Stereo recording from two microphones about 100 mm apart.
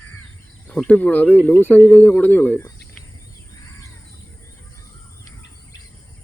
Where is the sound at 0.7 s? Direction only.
15° left (ahead or behind).